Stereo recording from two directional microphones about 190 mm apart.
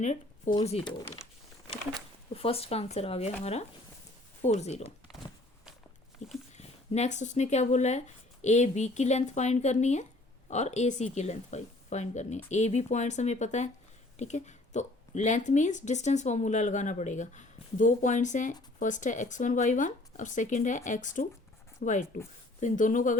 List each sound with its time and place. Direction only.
0.0 s a woman's voice: 40° left (ahead or behind)
2.3 s a woman's voice: 30° left (ahead or behind)
6.2 s a sound: 40° left (ahead or behind)
6.6 s a woman's voice: 35° left (ahead or behind)